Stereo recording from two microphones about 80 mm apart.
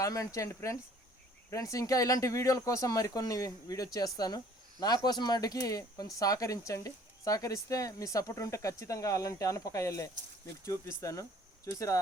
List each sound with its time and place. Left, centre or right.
0.0 s speech: left